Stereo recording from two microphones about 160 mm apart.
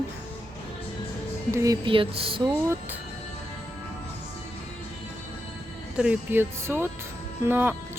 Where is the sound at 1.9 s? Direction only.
35° right (ahead or behind).